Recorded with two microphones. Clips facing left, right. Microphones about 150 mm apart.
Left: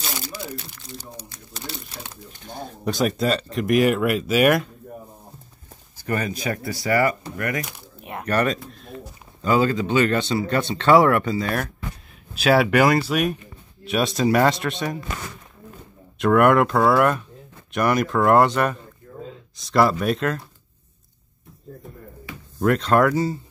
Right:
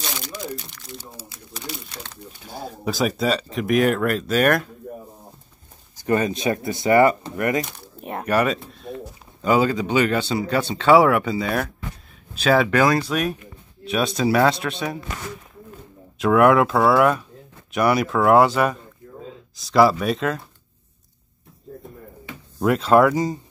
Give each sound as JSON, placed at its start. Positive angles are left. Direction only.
{"t": 0.0, "sound": "a sound", "side_deg": 5}
{"t": 1.1, "sound": "speech", "side_deg": -5}
{"t": 5.9, "sound": "speech", "side_deg": -20}
{"t": 8.0, "sound": "a sound", "side_deg": -40}
{"t": 8.3, "sound": "speech", "side_deg": -10}
{"t": 12.4, "sound": "speech", "side_deg": 5}
{"t": 16.2, "sound": "speech", "side_deg": 0}
{"t": 22.6, "sound": "speech", "side_deg": -5}